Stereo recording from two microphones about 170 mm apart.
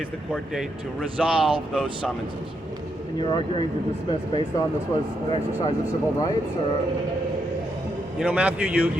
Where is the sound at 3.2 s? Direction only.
30° left (ahead or behind).